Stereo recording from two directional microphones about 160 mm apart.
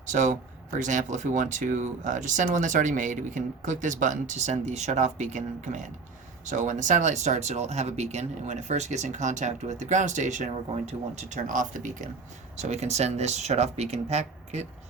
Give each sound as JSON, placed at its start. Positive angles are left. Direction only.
{"t": 0.1, "sound": "speech", "side_deg": -50}